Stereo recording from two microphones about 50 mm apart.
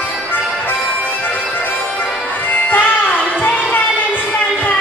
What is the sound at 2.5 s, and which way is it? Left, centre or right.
Music, left.